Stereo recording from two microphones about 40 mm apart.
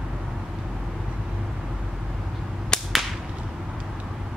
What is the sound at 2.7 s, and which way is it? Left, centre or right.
Whip, centre.